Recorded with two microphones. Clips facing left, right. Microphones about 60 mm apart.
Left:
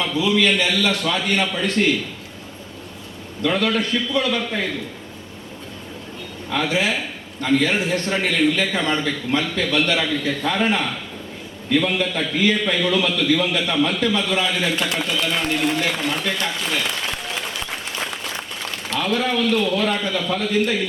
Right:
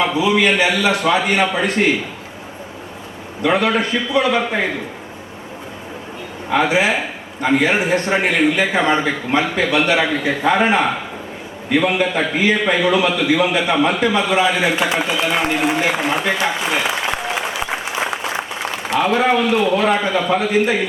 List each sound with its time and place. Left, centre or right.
0.0 s a man's voice: right
3.4 s a man's voice: right
6.5 s a man's voice: right
16.4 s applause: right
18.9 s a man's voice: right